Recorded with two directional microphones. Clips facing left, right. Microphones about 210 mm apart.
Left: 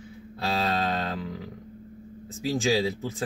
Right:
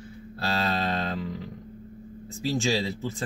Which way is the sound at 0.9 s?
Centre (ahead or behind).